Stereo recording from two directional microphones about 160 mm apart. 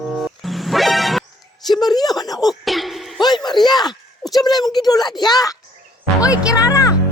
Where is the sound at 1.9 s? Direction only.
25° left (ahead or behind).